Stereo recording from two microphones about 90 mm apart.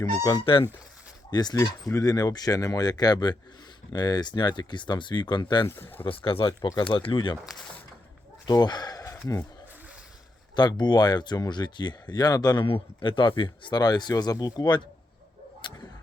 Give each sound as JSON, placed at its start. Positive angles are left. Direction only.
{"t": 0.0, "sound": "speech", "side_deg": 40}
{"t": 0.3, "sound": "speech", "side_deg": 75}
{"t": 1.3, "sound": "speech", "side_deg": 50}
{"t": 5.6, "sound": "speech", "side_deg": 25}
{"t": 6.1, "sound": "speech", "side_deg": 80}
{"t": 8.4, "sound": "speech", "side_deg": 50}
{"t": 10.5, "sound": "speech", "side_deg": 55}
{"t": 12.6, "sound": "speech", "side_deg": 75}
{"t": 15.6, "sound": "a sound", "side_deg": 60}